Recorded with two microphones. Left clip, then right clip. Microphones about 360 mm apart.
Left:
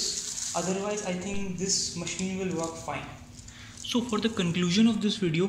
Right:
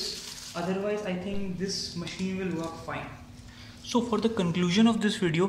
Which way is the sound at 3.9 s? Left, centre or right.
Centre.